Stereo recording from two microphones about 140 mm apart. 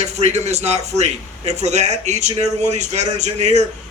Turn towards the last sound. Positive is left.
turn(degrees=-55)  # may be behind; listen again after turning